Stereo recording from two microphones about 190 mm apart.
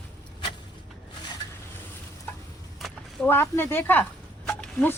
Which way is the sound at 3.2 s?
10° left (ahead or behind).